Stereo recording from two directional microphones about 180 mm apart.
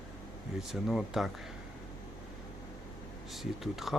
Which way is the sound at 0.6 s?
Centre (ahead or behind).